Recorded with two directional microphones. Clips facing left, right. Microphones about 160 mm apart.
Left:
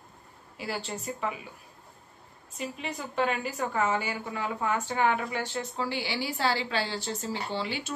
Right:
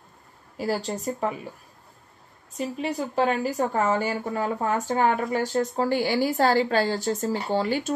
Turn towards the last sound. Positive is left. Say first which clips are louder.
# right 8 dB
turn(degrees=-45)  # may be behind; listen again after turning